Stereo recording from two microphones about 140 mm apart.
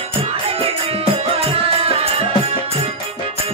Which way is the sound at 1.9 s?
45° right (ahead or behind).